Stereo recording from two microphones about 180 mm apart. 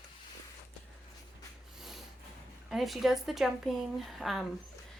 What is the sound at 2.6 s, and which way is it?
A woman's voice, centre (ahead or behind).